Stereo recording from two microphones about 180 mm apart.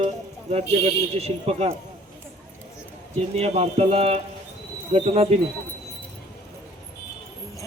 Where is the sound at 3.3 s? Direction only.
35° right (ahead or behind).